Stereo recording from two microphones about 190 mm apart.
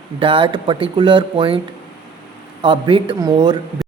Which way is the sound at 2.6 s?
25° right (ahead or behind).